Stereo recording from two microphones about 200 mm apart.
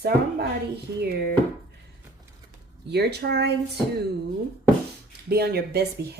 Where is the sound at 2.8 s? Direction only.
55° right (ahead or behind).